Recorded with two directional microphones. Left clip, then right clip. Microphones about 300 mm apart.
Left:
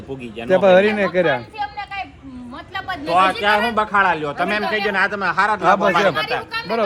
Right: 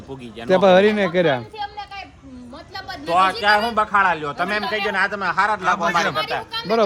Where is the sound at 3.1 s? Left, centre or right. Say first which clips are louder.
Left 1 dB; right.